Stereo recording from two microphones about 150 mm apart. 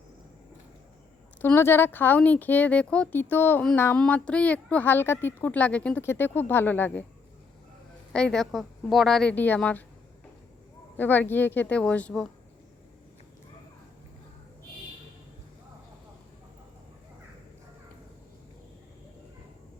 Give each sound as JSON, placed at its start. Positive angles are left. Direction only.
{"t": 1.4, "sound": "speech", "side_deg": 15}
{"t": 8.1, "sound": "a woman's voice", "side_deg": 5}
{"t": 10.9, "sound": "speech", "side_deg": 10}